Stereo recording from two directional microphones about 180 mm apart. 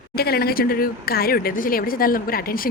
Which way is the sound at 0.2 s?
60° left (ahead or behind).